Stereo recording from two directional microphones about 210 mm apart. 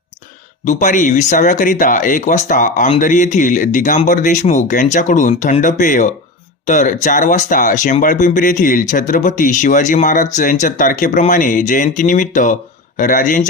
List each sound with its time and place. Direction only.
0.6 s speech: 35° left (ahead or behind)